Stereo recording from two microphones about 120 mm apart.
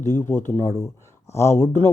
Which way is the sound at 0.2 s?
20° left (ahead or behind).